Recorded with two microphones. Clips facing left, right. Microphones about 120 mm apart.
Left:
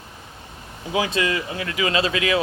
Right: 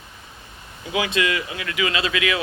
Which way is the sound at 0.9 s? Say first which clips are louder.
Even; 35° left (ahead or behind).